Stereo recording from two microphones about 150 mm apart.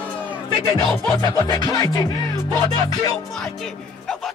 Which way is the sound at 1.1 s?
25° left (ahead or behind).